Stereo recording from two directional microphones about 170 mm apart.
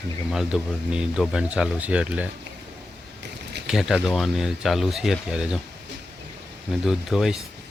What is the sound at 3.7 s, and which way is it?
Speech, centre (ahead or behind).